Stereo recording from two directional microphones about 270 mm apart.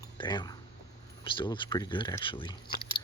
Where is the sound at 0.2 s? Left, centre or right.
Centre.